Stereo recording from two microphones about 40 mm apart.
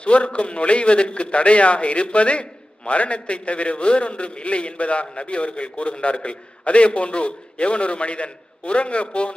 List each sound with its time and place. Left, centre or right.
0.0 s a man's voice: left